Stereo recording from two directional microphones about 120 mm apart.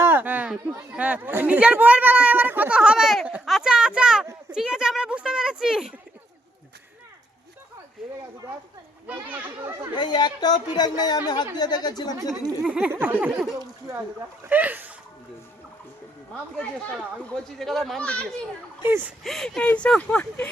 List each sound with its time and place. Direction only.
0.0 s a sound: 15° right (ahead or behind)
0.8 s speech: 15° right (ahead or behind)
9.2 s speech: 15° right (ahead or behind)
9.9 s speech: 40° left (ahead or behind)
12.3 s speech: 10° right (ahead or behind)
13.6 s speech: 25° right (ahead or behind)
14.5 s speech: 15° right (ahead or behind)
16.3 s speech: 10° left (ahead or behind)
18.8 s speech: 15° right (ahead or behind)
19.2 s speech: 5° left (ahead or behind)